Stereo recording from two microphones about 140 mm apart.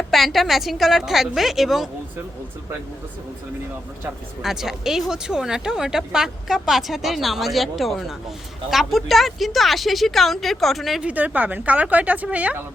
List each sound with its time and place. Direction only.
0.1 s speech: centre (ahead or behind)
4.4 s speech: centre (ahead or behind)